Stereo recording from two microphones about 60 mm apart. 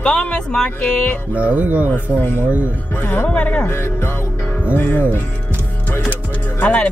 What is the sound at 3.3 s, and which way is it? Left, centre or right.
Speech, left.